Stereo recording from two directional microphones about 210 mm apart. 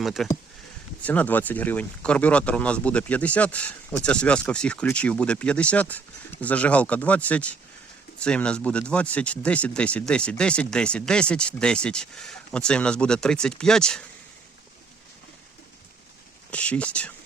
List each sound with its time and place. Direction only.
0.0 s speech: centre (ahead or behind)
16.5 s speech: 5° left (ahead or behind)